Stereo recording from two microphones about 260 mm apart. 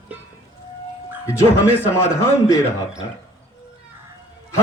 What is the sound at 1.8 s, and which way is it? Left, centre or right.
Speech, centre.